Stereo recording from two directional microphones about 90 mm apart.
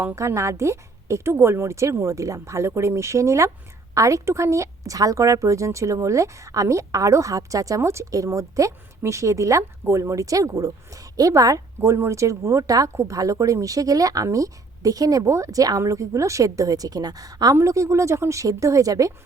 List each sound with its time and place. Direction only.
0.2 s speech: 30° right (ahead or behind)